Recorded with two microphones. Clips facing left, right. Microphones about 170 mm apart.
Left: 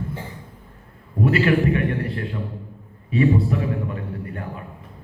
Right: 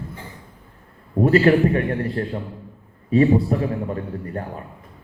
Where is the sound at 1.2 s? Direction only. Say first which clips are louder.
Right 3 dB; 40° right (ahead or behind).